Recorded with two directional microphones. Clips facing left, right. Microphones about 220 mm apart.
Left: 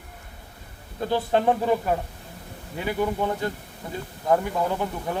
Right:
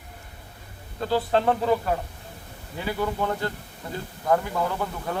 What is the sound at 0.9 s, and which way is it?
Speech, 15° left (ahead or behind).